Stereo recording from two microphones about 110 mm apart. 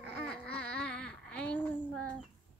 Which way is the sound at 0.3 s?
10° left (ahead or behind).